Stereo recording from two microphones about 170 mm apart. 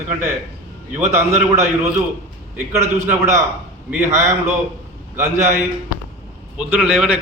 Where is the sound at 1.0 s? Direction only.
45° right (ahead or behind).